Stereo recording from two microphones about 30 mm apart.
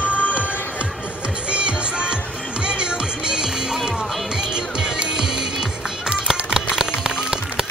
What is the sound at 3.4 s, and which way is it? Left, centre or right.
Music, centre.